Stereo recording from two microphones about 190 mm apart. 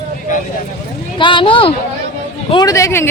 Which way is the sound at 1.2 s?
25° left (ahead or behind).